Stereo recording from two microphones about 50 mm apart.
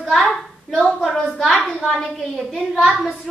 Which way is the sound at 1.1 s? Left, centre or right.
Centre.